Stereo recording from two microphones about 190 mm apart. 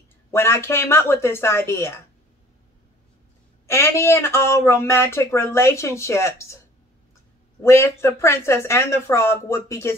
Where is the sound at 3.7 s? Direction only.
15° left (ahead or behind).